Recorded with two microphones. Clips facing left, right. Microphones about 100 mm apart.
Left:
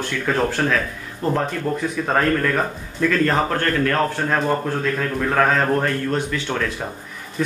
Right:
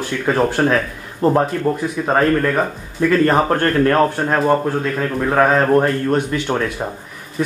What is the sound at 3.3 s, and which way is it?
Speech, 30° right (ahead or behind).